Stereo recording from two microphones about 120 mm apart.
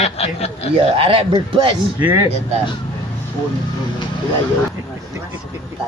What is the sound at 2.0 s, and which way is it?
Speech, 15° right (ahead or behind).